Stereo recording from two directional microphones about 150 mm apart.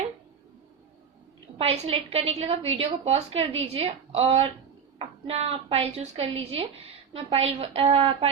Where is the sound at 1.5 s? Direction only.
45° right (ahead or behind).